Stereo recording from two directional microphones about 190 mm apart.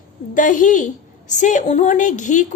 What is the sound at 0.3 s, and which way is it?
A woman's voice, 45° left (ahead or behind).